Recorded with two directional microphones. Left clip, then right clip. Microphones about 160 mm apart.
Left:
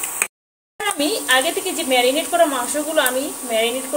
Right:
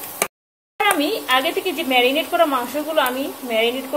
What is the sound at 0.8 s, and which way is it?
Speech, 15° right (ahead or behind).